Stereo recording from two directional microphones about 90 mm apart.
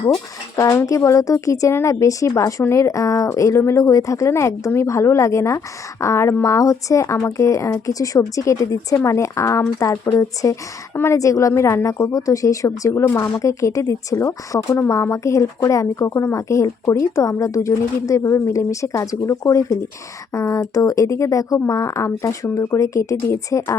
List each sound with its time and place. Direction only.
0.5 s speech: 40° left (ahead or behind)
13.1 s speech: 20° left (ahead or behind)
13.3 s speech: 35° left (ahead or behind)